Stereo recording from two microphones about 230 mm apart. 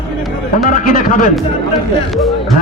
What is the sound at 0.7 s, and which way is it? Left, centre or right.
Speech, left.